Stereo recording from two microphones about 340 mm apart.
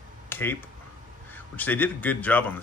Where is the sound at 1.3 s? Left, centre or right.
Centre.